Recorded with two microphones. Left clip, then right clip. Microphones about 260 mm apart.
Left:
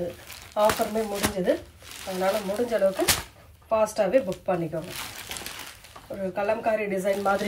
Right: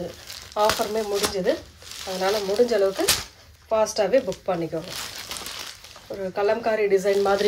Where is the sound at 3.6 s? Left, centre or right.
Right.